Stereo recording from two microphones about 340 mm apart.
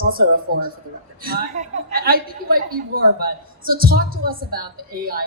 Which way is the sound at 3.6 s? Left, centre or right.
Right.